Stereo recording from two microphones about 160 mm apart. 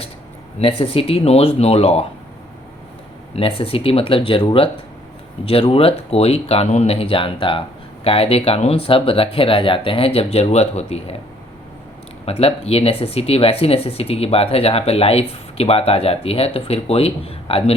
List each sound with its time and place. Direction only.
0.6 s speech: 35° left (ahead or behind)
3.3 s speech: 35° left (ahead or behind)
12.2 s speech: 40° left (ahead or behind)